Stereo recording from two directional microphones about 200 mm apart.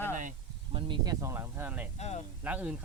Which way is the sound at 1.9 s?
35° left (ahead or behind).